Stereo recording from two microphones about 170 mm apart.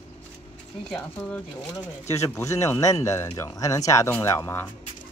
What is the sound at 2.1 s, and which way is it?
Speech, 15° left (ahead or behind).